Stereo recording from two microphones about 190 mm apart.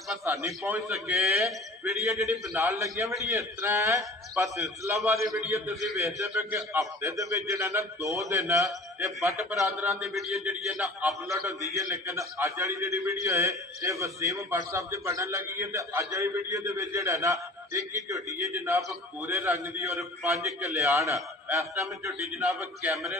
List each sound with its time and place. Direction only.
0.2 s a man's voice: 15° right (ahead or behind)
2.0 s a man's voice: 15° right (ahead or behind)
9.6 s a man's voice: 5° right (ahead or behind)
11.7 s a man's voice: 15° right (ahead or behind)